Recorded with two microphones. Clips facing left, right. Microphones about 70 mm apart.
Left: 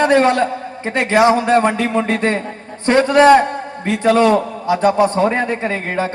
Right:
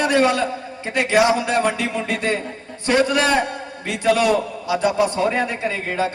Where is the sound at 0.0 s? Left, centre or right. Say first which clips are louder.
Left 5 dB; left.